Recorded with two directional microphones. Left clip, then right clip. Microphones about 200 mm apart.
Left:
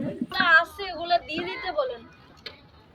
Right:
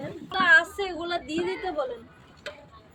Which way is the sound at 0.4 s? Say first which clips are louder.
Right 1 dB; 20° right (ahead or behind).